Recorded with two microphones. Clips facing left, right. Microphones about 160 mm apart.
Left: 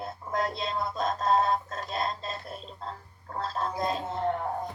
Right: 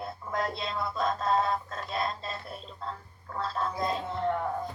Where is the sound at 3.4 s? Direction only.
45° left (ahead or behind).